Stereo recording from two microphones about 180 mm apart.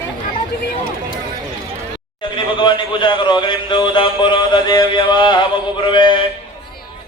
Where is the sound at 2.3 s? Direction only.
25° left (ahead or behind).